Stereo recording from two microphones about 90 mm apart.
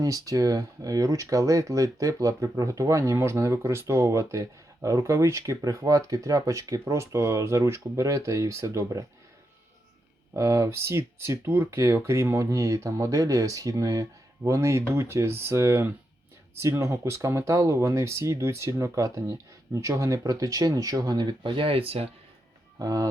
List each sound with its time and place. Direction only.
0.0 s speech: 40° right (ahead or behind)
10.3 s speech: 35° right (ahead or behind); by 22.1 s 90° right
22.8 s speech: 40° right (ahead or behind)